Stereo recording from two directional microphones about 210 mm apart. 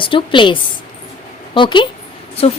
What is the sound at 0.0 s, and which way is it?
A woman's voice, 25° left (ahead or behind).